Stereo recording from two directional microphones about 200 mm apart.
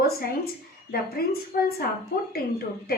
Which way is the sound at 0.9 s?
50° left (ahead or behind).